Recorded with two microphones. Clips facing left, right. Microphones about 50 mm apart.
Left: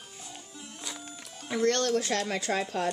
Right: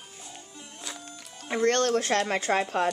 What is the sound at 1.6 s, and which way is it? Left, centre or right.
Speech, right.